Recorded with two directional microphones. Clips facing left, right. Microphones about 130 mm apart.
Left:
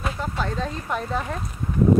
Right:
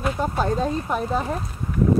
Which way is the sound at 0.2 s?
40° right (ahead or behind).